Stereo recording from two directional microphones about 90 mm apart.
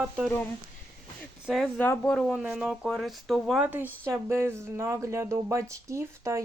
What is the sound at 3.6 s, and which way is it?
Speech, 20° right (ahead or behind).